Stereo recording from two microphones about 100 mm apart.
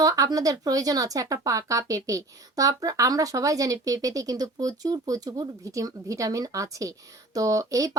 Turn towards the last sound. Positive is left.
turn(degrees=-35)  # may be behind; listen again after turning